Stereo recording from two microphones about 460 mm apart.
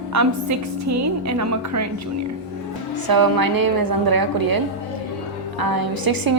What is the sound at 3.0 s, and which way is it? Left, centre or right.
A woman's voice, right.